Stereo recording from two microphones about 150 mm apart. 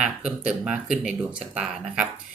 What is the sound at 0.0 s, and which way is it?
Speech, 5° right (ahead or behind).